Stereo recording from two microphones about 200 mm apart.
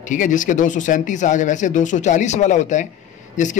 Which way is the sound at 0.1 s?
40° left (ahead or behind).